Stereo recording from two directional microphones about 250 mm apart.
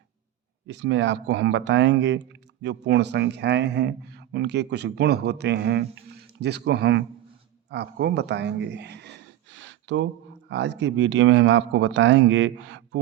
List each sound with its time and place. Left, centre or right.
0.7 s speech: right